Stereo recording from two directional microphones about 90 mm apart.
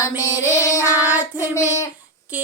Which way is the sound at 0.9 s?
20° right (ahead or behind).